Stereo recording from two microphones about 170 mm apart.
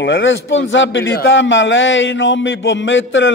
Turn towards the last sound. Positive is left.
turn(degrees=90)